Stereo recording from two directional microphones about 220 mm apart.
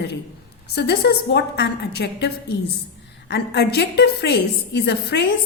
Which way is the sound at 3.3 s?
50° left (ahead or behind).